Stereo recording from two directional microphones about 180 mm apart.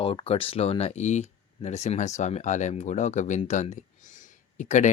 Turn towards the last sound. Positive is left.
turn(degrees=45)  # may be behind; listen again after turning